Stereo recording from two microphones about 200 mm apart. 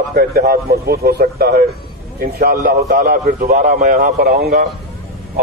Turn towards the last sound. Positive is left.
turn(degrees=-50)  # may be behind; listen again after turning